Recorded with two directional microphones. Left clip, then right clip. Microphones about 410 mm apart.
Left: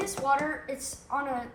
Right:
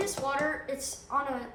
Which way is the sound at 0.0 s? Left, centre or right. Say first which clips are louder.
Left 3 dB; centre.